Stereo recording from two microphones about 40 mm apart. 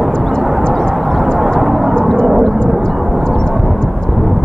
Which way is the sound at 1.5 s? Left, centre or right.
Centre.